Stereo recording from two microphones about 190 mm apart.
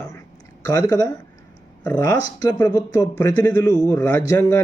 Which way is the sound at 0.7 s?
15° left (ahead or behind).